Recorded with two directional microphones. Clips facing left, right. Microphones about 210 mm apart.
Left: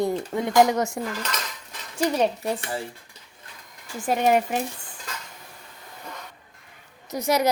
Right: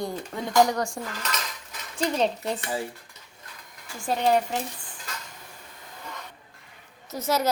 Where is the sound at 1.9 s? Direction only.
10° left (ahead or behind).